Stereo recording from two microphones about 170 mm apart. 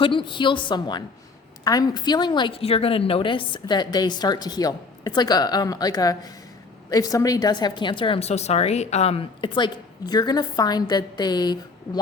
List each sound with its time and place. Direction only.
0.0 s a woman's voice: 30° left (ahead or behind)